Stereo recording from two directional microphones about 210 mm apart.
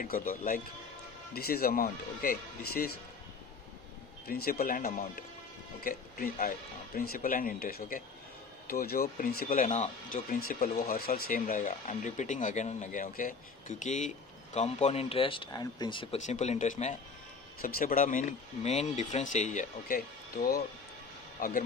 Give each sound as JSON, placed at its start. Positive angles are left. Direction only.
{"t": 0.0, "sound": "speech", "side_deg": 40}
{"t": 4.4, "sound": "speech", "side_deg": 45}
{"t": 10.5, "sound": "speech", "side_deg": 45}